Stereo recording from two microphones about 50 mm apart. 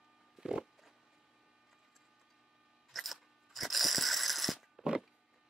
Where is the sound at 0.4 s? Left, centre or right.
Centre.